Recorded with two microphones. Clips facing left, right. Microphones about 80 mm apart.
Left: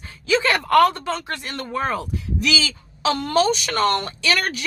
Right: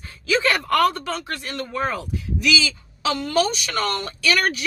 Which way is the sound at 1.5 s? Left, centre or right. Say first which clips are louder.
Left 1 dB; left.